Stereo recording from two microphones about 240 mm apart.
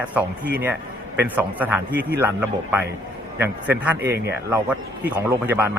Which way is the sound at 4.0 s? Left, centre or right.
Right.